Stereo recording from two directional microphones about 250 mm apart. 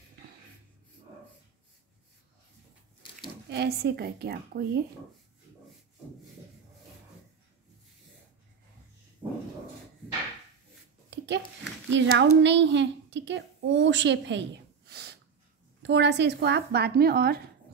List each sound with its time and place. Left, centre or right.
3.4 s a woman's voice: right
11.1 s a sound: right
11.9 s a woman's voice: right